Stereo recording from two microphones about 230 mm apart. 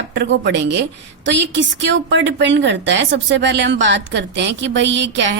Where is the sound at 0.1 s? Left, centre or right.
Right.